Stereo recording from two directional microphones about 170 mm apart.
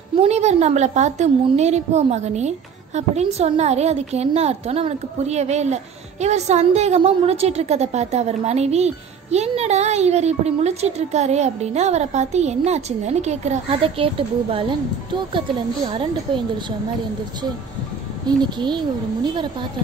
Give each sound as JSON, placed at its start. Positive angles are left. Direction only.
{"t": 0.2, "sound": "a woman's voice", "side_deg": -40}
{"t": 18.2, "sound": "speech", "side_deg": -25}